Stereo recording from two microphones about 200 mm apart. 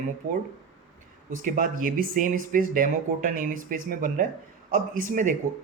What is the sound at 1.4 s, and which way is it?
Speech, 40° right (ahead or behind).